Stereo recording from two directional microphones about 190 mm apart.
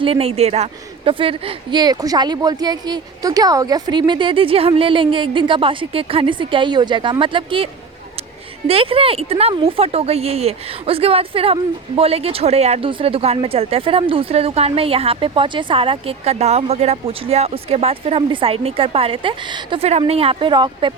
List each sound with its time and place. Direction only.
0.0 s a woman's voice: 30° right (ahead or behind)